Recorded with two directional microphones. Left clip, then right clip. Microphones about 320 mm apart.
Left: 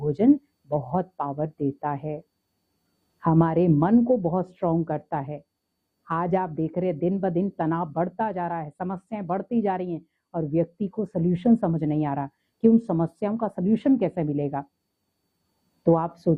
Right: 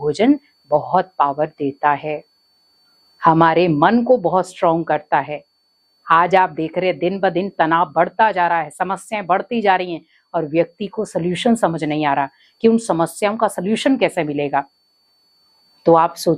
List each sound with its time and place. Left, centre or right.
0.1 s speech: centre
4.1 s speech: right
4.4 s speech: centre
15.8 s speech: centre